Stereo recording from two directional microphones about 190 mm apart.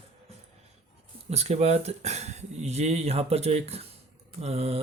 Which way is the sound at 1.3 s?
35° right (ahead or behind).